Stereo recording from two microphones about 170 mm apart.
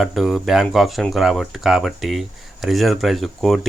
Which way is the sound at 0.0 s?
Centre (ahead or behind).